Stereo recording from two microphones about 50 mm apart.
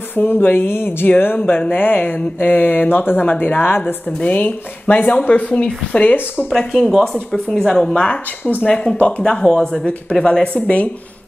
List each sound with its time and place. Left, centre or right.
0.1 s speech: left
6.5 s speech: centre
7.5 s speech: centre
8.0 s speech: left
8.6 s speech: centre